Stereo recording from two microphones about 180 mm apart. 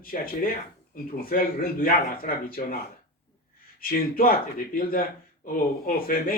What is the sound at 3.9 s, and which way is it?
Speech, 55° left (ahead or behind).